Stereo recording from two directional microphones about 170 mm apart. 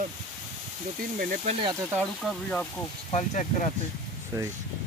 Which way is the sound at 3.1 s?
45° left (ahead or behind).